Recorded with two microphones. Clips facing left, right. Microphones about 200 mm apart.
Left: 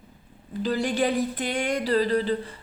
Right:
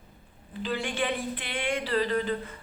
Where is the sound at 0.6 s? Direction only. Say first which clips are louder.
Left 6 dB; 40° left (ahead or behind).